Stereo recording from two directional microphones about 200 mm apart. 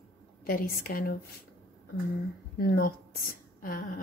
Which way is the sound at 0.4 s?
45° left (ahead or behind).